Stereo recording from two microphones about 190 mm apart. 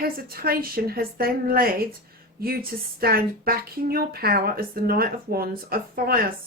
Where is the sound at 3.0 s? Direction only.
50° right (ahead or behind).